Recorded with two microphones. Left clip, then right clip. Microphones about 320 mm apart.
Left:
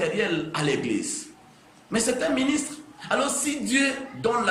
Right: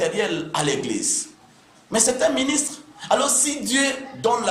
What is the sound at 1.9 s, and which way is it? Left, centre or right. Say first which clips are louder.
A man's voice: right 5 dB; right.